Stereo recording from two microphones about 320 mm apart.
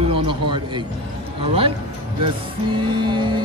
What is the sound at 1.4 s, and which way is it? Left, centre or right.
Music, centre.